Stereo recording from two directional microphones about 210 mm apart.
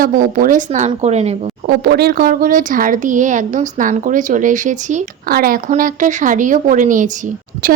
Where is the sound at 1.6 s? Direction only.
50° right (ahead or behind).